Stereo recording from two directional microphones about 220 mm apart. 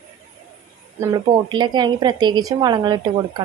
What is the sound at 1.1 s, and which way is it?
A woman's voice, 20° right (ahead or behind).